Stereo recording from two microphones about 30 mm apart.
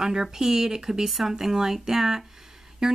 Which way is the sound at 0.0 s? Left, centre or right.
Centre.